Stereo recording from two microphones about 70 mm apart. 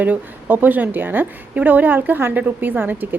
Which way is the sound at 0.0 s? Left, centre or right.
Right.